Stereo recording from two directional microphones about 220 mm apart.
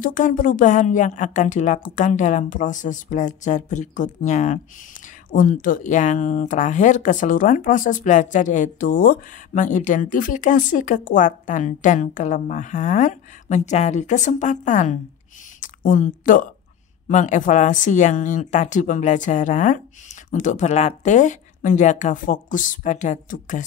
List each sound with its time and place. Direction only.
0.0 s speech: 35° left (ahead or behind)